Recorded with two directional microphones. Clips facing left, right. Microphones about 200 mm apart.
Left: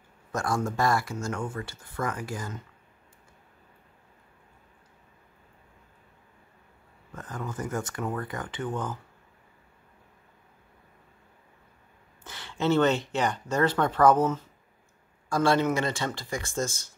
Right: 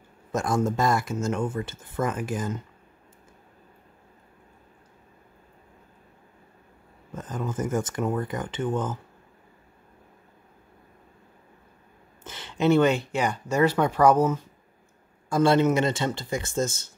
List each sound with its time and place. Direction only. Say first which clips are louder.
0.3 s speech: right 4 dB; 20° right (ahead or behind)
7.1 s speech: right 5 dB; 20° right (ahead or behind)
12.2 s speech: right 4 dB; 20° right (ahead or behind)
15.2 s speech: right 4 dB; 20° right (ahead or behind)